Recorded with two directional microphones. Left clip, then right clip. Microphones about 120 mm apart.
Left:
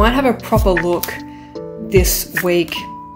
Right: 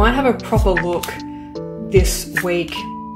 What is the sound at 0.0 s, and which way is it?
Speech, 35° left (ahead or behind).